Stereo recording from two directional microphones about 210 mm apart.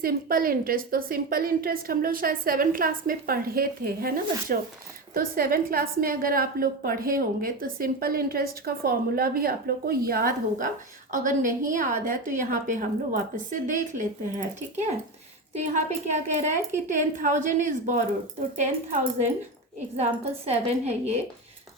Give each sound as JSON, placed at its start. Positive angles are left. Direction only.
{"t": 0.0, "sound": "a woman's voice", "side_deg": -45}
{"t": 15.5, "sound": "a woman's voice", "side_deg": -35}